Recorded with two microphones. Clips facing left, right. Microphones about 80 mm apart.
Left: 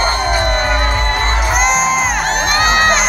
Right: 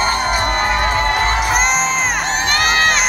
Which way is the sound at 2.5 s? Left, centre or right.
Centre.